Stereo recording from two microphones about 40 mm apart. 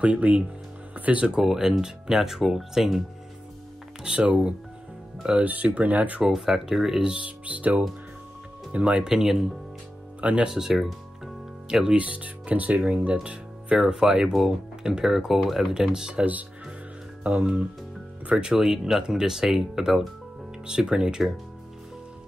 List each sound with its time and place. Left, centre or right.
0.0 s speech: right
1.4 s speech: centre
4.0 s speech: right
5.4 s speech: right
6.2 s speech: centre
7.2 s speech: right
8.7 s speech: right
10.2 s speech: right
10.5 s speech: centre
10.8 s music: centre
11.9 s speech: right
18.3 s speech: centre